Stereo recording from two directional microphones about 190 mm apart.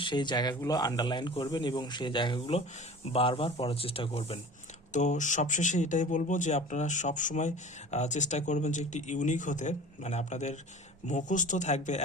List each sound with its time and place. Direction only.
0.0 s speech: 25° left (ahead or behind)